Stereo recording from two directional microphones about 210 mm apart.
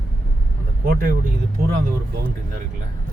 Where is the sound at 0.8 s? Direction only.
45° right (ahead or behind).